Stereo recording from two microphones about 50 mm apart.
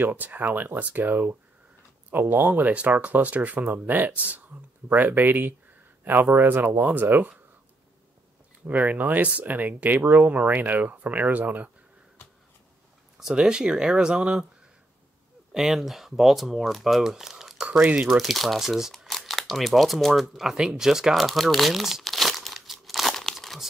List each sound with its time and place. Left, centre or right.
0.0 s speech: right
3.6 s speech: right
8.6 s speech: right
13.2 s speech: centre
15.5 s speech: centre
17.6 s speech: right
18.0 s speech: centre
20.5 s crumpling: centre
23.3 s tearing: centre